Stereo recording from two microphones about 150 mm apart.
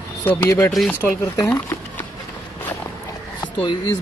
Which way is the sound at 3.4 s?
30° left (ahead or behind).